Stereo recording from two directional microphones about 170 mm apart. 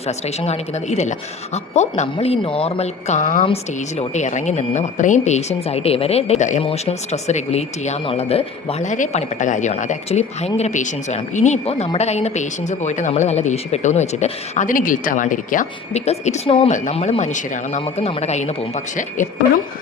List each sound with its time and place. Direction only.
0.1 s a woman's voice: 40° left (ahead or behind)
3.4 s a woman's voice: 35° left (ahead or behind)
17.8 s a woman's voice: 35° left (ahead or behind)